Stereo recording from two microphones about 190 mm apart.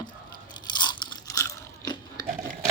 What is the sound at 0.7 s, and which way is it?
Crunch, 25° left (ahead or behind).